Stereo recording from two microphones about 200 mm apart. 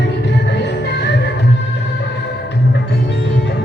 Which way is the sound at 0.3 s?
60° left (ahead or behind).